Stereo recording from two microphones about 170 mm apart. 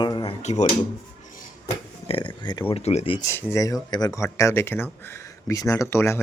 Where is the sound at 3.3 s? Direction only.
15° left (ahead or behind).